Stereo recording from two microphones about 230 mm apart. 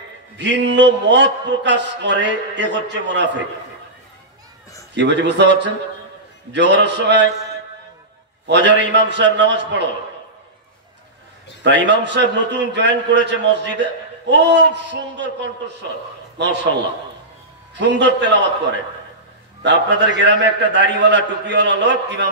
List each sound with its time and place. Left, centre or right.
0.4 s a man's voice: right
4.9 s a man's voice: right
8.5 s a man's voice: right
11.6 s a man's voice: right
16.4 s a man's voice: right
17.7 s a man's voice: right
19.6 s a man's voice: right